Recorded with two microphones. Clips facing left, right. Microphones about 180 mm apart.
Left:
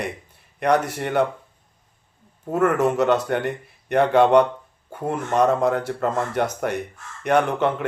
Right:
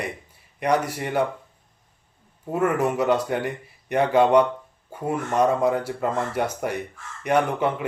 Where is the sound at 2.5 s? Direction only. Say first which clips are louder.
Left 3 dB; 10° right (ahead or behind).